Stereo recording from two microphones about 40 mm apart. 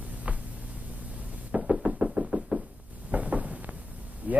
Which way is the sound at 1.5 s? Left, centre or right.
Right.